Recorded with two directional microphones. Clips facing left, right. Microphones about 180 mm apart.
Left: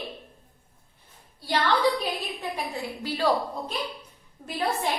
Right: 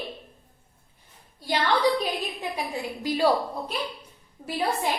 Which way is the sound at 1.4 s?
15° right (ahead or behind).